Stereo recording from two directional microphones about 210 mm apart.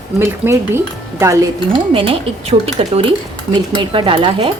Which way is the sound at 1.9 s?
25° right (ahead or behind).